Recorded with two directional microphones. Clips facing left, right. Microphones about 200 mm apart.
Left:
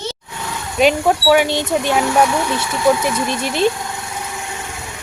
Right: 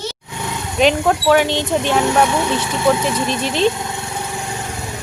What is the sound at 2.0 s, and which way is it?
Speech, 15° right (ahead or behind).